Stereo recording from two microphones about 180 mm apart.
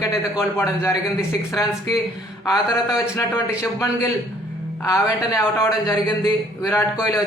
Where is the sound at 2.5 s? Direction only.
20° left (ahead or behind).